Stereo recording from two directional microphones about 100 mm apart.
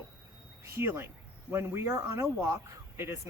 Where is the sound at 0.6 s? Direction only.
25° right (ahead or behind).